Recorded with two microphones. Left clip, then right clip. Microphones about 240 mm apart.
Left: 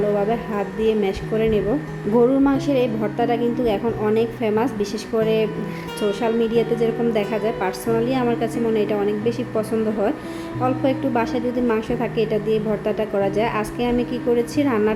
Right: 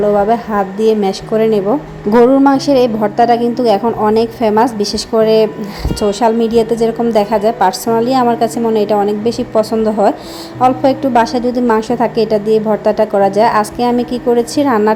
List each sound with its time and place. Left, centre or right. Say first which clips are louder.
0.3 s a woman's voice: right 10 dB; right